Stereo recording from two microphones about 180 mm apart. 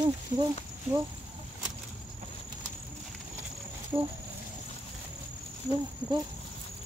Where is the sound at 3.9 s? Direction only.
10° right (ahead or behind).